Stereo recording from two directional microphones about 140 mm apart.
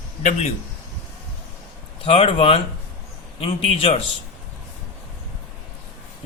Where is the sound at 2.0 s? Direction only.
40° left (ahead or behind).